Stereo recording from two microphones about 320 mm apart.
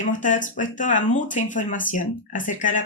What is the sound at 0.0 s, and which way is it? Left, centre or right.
Speech, left.